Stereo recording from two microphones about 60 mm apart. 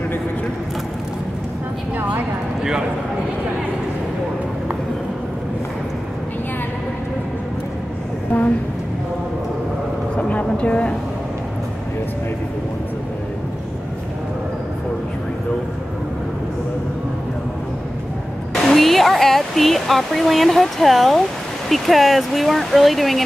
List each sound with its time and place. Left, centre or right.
2.0 s clip-clop: right
10.1 s a sound: left
18.7 s speech: centre